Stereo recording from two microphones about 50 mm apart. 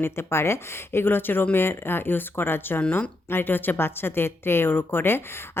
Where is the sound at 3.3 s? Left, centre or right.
Left.